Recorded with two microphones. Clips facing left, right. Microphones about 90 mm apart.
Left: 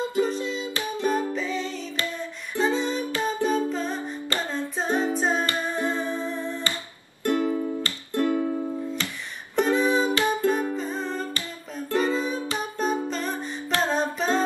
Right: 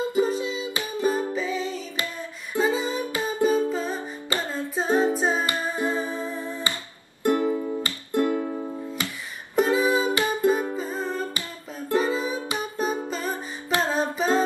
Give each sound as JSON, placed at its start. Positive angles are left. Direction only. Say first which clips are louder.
{"t": 0.2, "sound": "music", "louder": "right 1 dB", "side_deg": -5}
{"t": 7.2, "sound": "music", "louder": "right 1 dB", "side_deg": -20}